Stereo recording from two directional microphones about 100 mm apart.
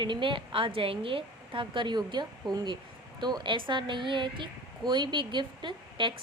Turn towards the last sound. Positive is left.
turn(degrees=-55)  # may be behind; listen again after turning